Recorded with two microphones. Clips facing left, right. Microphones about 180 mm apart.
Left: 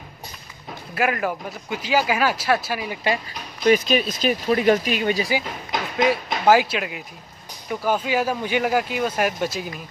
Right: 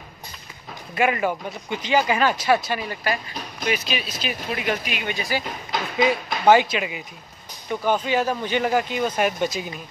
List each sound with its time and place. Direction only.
0.9 s speech: centre (ahead or behind)
3.6 s speech: 45° left (ahead or behind)
5.9 s speech: 5° left (ahead or behind)